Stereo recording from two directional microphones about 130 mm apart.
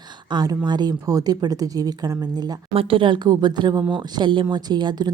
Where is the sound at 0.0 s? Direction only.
35° right (ahead or behind).